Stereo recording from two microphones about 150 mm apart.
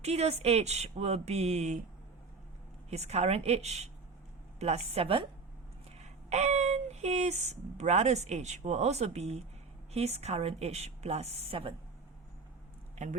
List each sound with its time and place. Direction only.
0.0 s speech: 45° right (ahead or behind)
2.9 s a woman's voice: 45° right (ahead or behind)
6.0 s speech: 50° right (ahead or behind)